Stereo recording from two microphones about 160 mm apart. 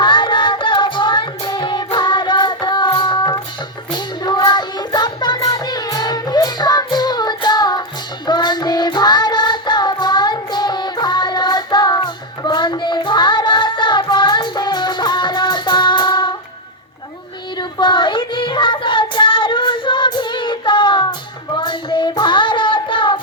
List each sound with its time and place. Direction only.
0.0 s music: 30° left (ahead or behind)
3.9 s child singing: 25° left (ahead or behind)
8.3 s music: 25° left (ahead or behind)
17.6 s child singing: 30° left (ahead or behind)